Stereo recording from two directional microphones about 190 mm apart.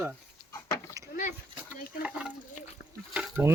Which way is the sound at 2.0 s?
5° right (ahead or behind).